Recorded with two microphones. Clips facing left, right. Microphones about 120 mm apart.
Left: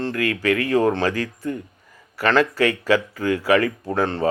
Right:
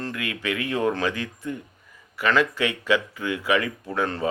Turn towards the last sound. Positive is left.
turn(degrees=30)  # may be behind; listen again after turning